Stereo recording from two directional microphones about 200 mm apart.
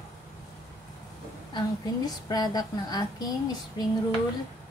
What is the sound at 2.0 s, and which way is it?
A woman's voice, 20° left (ahead or behind).